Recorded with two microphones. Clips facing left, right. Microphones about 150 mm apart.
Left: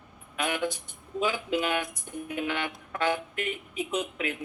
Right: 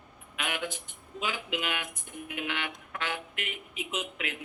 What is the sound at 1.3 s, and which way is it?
Speech, 40° left (ahead or behind).